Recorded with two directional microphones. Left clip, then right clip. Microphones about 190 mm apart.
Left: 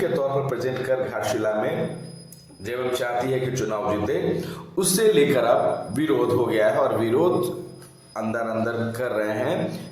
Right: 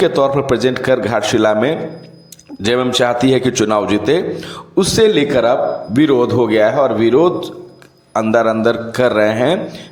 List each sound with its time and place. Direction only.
0.0 s a man's voice: 45° right (ahead or behind)
2.6 s a man's voice: 55° right (ahead or behind); by 7.3 s 30° right (ahead or behind)
8.1 s a man's voice: 45° right (ahead or behind)